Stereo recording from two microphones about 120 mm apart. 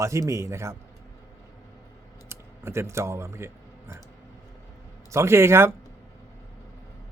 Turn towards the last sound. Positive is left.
turn(degrees=-20)  # may be behind; listen again after turning